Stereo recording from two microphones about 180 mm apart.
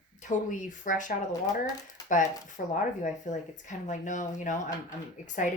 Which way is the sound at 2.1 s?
45° left (ahead or behind).